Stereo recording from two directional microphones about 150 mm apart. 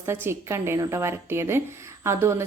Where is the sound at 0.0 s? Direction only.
15° right (ahead or behind).